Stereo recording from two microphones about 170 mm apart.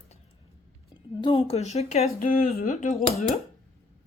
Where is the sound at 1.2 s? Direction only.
30° left (ahead or behind).